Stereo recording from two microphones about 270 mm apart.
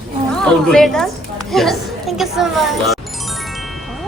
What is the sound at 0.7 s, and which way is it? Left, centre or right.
Speech, centre.